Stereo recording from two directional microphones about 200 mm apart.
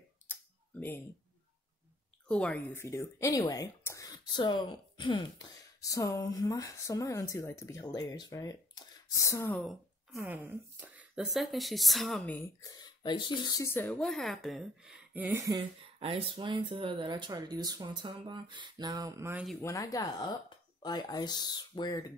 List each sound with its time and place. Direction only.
0.3 s a sound: 10° left (ahead or behind)
2.2 s speech: 5° left (ahead or behind)
10.2 s a woman's voice: 10° right (ahead or behind)
15.4 s speech: 25° right (ahead or behind)
19.6 s speech: 15° left (ahead or behind)